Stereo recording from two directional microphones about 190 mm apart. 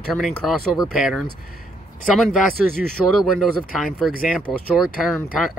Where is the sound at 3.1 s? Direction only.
Centre (ahead or behind).